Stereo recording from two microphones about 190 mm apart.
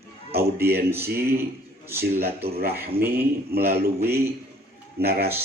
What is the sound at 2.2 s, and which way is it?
Speech, 55° right (ahead or behind).